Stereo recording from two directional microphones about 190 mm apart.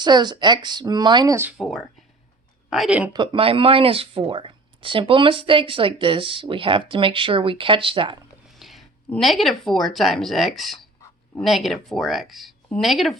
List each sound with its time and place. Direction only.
0.0 s speech: 20° right (ahead or behind)
1.5 s speech: centre (ahead or behind)
3.1 s speech: 25° right (ahead or behind)
8.4 s speech: centre (ahead or behind)